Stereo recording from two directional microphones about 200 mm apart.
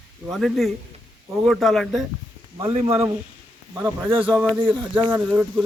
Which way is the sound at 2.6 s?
25° right (ahead or behind).